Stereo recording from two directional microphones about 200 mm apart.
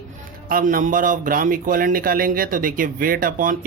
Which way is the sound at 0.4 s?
45° right (ahead or behind).